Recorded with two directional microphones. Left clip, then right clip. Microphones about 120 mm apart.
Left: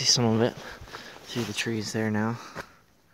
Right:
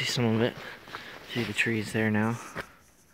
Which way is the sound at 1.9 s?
Centre (ahead or behind).